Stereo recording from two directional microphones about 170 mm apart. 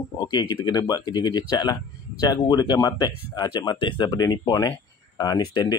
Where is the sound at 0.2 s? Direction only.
25° left (ahead or behind).